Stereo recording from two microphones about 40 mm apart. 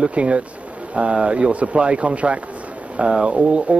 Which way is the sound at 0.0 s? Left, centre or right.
Right.